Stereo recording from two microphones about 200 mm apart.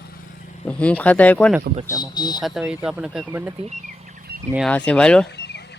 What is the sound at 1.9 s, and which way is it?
Speech, 20° left (ahead or behind).